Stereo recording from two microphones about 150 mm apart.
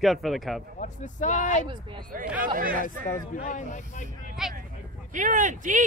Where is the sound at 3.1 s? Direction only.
60° left (ahead or behind).